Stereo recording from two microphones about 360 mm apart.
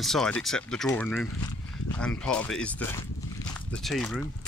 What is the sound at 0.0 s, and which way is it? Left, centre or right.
Speech, centre.